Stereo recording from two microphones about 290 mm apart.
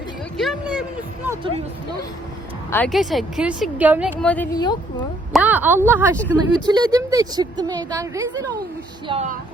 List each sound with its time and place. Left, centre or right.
0.3 s a sound: centre
2.6 s speech: centre
5.3 s speech: centre
9.0 s speech: right